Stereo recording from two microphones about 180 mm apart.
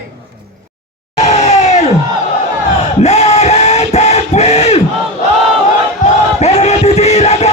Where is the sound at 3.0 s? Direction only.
40° left (ahead or behind).